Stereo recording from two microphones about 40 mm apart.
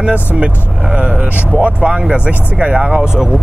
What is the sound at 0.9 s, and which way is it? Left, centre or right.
Speech, right.